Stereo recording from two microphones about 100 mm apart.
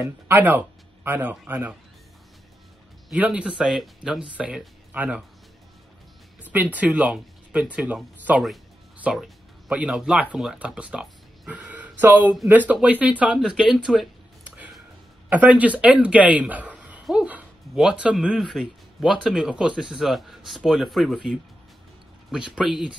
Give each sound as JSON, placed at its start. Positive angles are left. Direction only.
{"t": 0.0, "sound": "speech", "side_deg": -20}
{"t": 3.1, "sound": "speech", "side_deg": -15}
{"t": 6.4, "sound": "speech", "side_deg": -15}
{"t": 11.8, "sound": "a sound", "side_deg": -15}
{"t": 12.4, "sound": "speech", "side_deg": -15}
{"t": 15.2, "sound": "speech", "side_deg": -15}
{"t": 17.0, "sound": "dog", "side_deg": -10}
{"t": 17.7, "sound": "speech", "side_deg": -10}
{"t": 22.3, "sound": "speech", "side_deg": -10}